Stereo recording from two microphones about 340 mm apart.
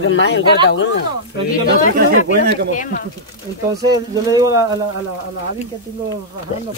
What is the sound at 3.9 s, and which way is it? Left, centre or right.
Speech, centre.